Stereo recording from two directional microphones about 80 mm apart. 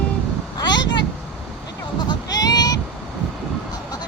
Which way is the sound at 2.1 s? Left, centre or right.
Left.